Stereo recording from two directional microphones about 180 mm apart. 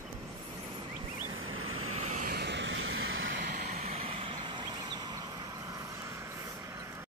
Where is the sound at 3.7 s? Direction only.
35° right (ahead or behind).